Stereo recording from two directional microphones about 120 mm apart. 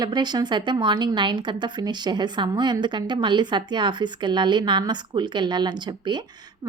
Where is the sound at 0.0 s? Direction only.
35° right (ahead or behind).